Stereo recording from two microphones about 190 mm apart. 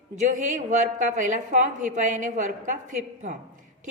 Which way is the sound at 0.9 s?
40° right (ahead or behind).